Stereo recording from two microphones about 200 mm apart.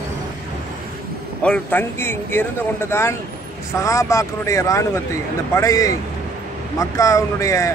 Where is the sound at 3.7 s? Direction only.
15° left (ahead or behind).